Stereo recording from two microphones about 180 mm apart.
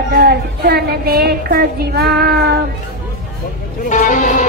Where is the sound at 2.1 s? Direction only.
60° right (ahead or behind).